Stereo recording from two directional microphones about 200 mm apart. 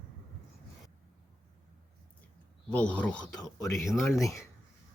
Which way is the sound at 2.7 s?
5° left (ahead or behind).